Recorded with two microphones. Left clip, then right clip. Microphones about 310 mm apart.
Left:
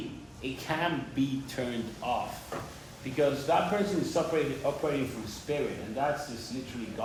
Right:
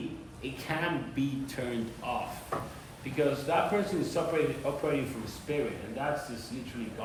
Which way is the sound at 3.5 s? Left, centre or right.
Centre.